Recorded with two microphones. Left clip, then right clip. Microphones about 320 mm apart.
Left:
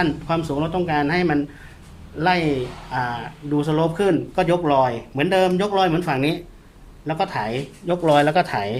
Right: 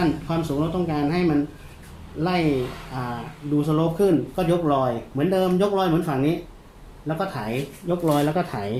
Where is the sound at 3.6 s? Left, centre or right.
Left.